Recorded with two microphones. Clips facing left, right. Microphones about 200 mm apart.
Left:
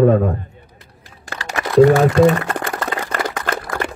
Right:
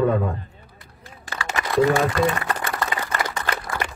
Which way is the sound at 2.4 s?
50° left (ahead or behind).